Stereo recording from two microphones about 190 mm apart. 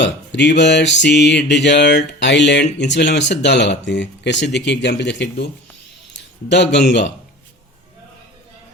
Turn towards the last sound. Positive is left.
turn(degrees=65)  # may be behind; listen again after turning